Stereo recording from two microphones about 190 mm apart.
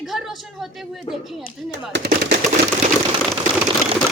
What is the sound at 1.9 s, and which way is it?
Speech, 60° right (ahead or behind).